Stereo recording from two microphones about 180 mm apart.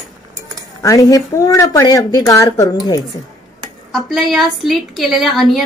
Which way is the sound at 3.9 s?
Centre (ahead or behind).